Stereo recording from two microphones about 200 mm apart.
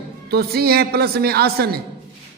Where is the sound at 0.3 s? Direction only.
50° right (ahead or behind).